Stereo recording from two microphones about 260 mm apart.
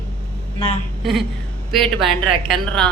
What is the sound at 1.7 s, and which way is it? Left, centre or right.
Speech, centre.